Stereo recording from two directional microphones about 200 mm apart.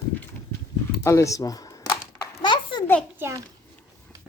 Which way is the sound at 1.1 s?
15° left (ahead or behind).